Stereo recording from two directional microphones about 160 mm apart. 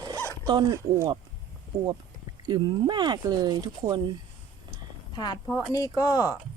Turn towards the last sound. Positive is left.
turn(degrees=20)  # may be behind; listen again after turning